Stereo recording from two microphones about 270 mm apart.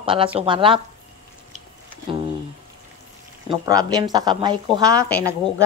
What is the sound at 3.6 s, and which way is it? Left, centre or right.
Speech, centre.